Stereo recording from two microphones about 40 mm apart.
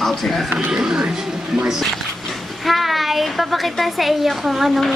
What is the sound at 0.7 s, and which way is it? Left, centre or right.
Speech, centre.